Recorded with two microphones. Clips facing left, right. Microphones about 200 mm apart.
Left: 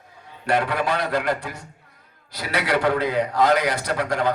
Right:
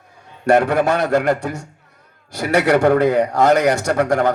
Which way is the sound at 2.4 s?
50° right (ahead or behind).